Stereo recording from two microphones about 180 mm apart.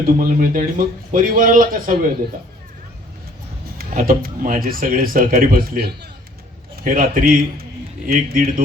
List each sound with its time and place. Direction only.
0.0 s speech: 50° right (ahead or behind)
3.8 s speech: 55° right (ahead or behind)
6.8 s speech: 50° right (ahead or behind)